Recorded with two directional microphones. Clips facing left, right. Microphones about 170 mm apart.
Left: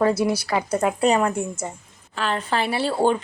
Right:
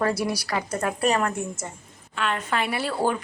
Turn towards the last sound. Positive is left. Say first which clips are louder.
# left 4 dB
turn(degrees=25)  # may be behind; listen again after turning